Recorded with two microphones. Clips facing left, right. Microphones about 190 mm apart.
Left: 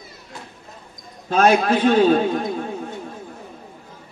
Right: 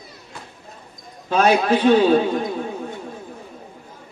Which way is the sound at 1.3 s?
50° left (ahead or behind).